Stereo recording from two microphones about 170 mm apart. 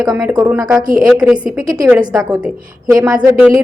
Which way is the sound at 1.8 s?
20° right (ahead or behind).